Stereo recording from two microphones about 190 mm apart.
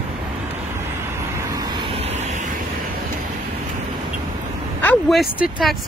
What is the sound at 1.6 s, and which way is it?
Vehicle, 25° right (ahead or behind).